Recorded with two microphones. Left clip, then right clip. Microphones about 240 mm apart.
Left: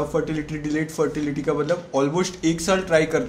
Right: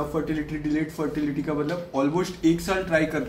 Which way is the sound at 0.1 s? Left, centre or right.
Left.